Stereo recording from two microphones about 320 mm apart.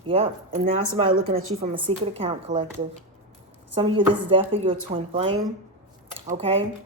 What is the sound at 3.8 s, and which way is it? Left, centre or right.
Speech, centre.